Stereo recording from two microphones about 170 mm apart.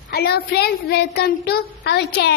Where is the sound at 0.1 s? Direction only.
70° left (ahead or behind).